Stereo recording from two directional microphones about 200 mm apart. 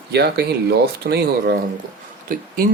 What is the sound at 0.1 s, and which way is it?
Speech, 55° right (ahead or behind).